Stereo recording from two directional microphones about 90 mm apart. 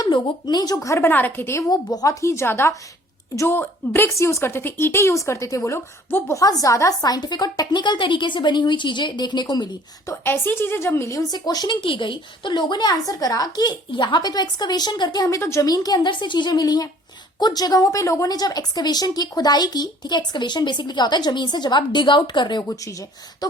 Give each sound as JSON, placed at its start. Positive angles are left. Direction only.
{"t": 0.0, "sound": "a woman's voice", "side_deg": 50}
{"t": 1.7, "sound": "a woman's voice", "side_deg": 45}
{"t": 2.2, "sound": "a woman's voice", "side_deg": 30}
{"t": 6.3, "sound": "a woman's voice", "side_deg": 40}
{"t": 10.1, "sound": "a woman's voice", "side_deg": 25}
{"t": 11.3, "sound": "a woman's voice", "side_deg": 50}
{"t": 11.8, "sound": "a woman's voice", "side_deg": 70}
{"t": 15.4, "sound": "a woman's voice", "side_deg": 30}
{"t": 15.6, "sound": "a woman's voice", "side_deg": 45}
{"t": 22.6, "sound": "a woman's voice", "side_deg": 40}